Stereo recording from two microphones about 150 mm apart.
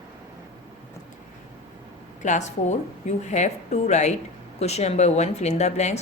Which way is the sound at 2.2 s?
50° left (ahead or behind).